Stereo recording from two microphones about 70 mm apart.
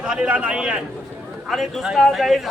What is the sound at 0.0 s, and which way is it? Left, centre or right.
Speech, centre.